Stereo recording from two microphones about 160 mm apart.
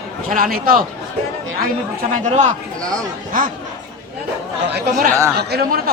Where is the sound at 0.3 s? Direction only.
65° right (ahead or behind).